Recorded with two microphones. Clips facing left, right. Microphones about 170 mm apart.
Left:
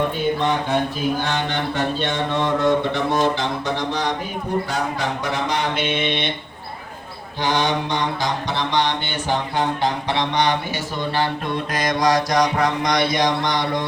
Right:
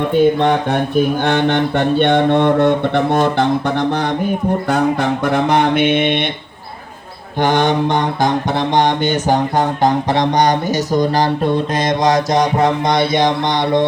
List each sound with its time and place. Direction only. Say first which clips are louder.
0.3 s mantra: right 5 dB; 60° right (ahead or behind)
7.3 s mantra: right 7 dB; 50° right (ahead or behind); by 13.8 s 25° right (ahead or behind)